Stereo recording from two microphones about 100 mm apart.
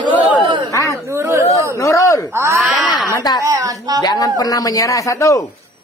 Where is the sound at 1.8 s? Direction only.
30° left (ahead or behind).